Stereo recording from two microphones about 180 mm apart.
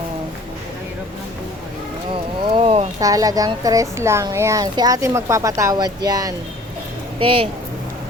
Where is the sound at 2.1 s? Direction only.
30° right (ahead or behind).